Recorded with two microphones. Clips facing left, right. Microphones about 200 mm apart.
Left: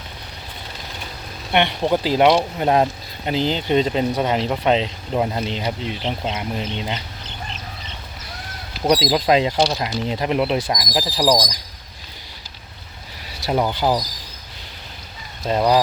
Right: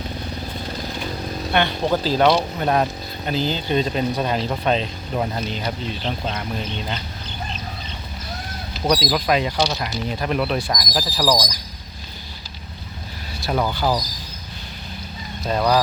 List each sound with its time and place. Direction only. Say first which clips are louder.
1.5 s speech: left 2 dB; 20° left (ahead or behind)
8.9 s speech: left 3 dB; 20° left (ahead or behind)
13.5 s speech: left 2 dB; 20° left (ahead or behind)
15.4 s speech: left 2 dB; 20° left (ahead or behind)